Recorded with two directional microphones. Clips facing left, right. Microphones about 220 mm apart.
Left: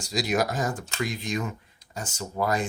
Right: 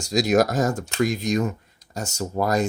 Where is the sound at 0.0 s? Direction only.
45° right (ahead or behind).